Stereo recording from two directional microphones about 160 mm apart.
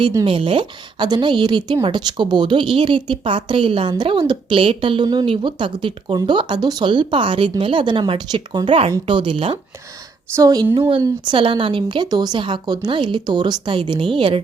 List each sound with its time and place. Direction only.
0.3 s a woman's voice: 35° right (ahead or behind)
10.3 s a woman's voice: 25° right (ahead or behind)